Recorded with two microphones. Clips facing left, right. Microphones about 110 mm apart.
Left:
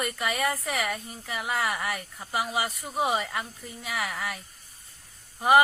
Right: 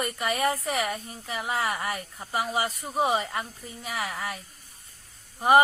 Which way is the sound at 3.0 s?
25° right (ahead or behind).